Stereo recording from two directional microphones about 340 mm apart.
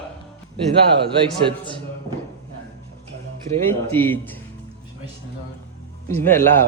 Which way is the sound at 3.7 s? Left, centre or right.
Centre.